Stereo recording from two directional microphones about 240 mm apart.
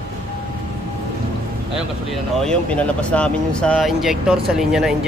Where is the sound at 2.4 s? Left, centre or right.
Centre.